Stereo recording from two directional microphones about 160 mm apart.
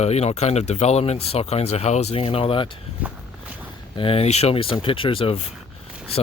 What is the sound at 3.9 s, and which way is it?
Speech, 35° left (ahead or behind).